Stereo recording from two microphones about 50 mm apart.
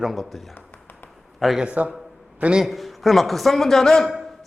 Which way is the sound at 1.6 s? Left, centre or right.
Right.